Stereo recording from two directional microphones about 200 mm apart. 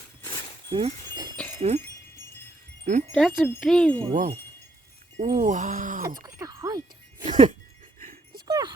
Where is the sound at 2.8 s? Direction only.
35° right (ahead or behind).